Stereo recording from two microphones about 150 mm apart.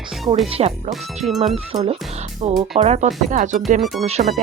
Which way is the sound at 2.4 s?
45° right (ahead or behind).